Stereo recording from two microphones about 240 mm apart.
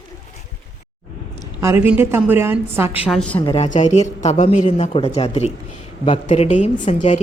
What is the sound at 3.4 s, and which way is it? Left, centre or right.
A woman's voice, left.